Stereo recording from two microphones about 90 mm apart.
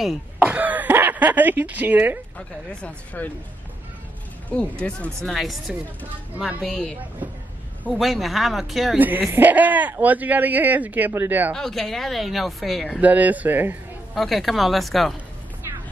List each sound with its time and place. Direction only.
0.4 s a sound: 20° right (ahead or behind)
2.3 s speech: 15° left (ahead or behind)
4.5 s speech: 10° left (ahead or behind)
5.2 s speech: centre (ahead or behind)
6.3 s a woman's voice: 20° right (ahead or behind)
6.6 s speech: 5° left (ahead or behind)
8.9 s speech: 20° right (ahead or behind)
11.5 s speech: 5° left (ahead or behind)
13.0 s speech: 20° right (ahead or behind)
14.1 s speech: centre (ahead or behind)